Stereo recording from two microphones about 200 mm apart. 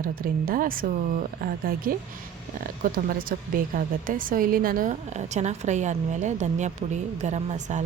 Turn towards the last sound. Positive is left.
turn(degrees=-35)  # may be behind; listen again after turning